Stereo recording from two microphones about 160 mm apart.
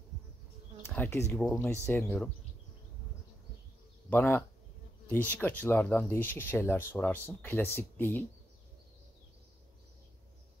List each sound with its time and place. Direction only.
0.8 s speech: 15° left (ahead or behind)
1.4 s speech: 5° left (ahead or behind)
4.1 s speech: 10° left (ahead or behind)